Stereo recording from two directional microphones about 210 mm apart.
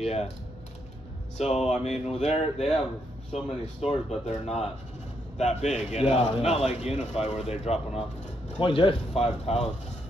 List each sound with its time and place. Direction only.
0.0 s speech: 30° left (ahead or behind)
1.4 s a man's voice: 30° left (ahead or behind)